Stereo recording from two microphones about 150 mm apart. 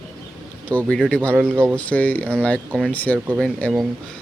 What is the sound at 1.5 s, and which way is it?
Speech, 15° right (ahead or behind).